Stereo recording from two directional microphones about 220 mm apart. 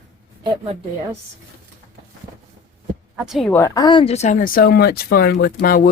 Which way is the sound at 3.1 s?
5° right (ahead or behind).